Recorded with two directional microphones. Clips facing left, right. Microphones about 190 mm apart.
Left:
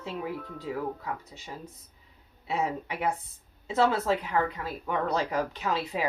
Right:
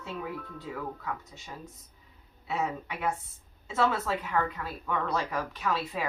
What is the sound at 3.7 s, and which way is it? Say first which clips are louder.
Speech: left 3 dB; 30° left (ahead or behind).